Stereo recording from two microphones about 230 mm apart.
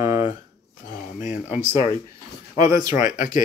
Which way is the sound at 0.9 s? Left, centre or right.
Left.